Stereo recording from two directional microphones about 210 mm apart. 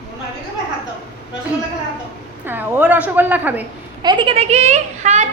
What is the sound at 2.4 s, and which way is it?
A woman's voice, 10° right (ahead or behind).